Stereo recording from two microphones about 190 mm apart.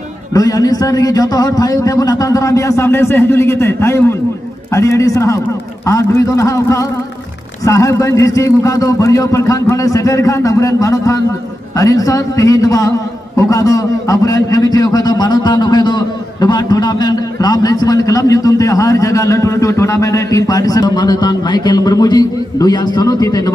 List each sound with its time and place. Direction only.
0.3 s a man's voice: 20° left (ahead or behind)